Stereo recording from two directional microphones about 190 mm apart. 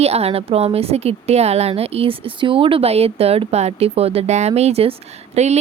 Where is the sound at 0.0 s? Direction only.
35° right (ahead or behind).